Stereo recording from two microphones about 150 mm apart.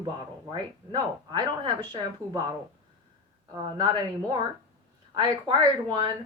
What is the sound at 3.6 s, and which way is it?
Speech, 30° right (ahead or behind).